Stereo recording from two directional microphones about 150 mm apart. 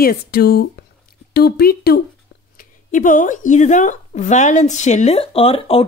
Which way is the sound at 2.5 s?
60° left (ahead or behind).